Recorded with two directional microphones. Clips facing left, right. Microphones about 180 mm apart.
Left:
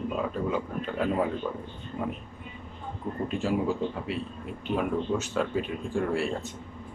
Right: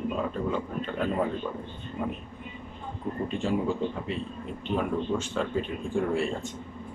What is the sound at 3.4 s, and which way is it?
Speech, 5° left (ahead or behind).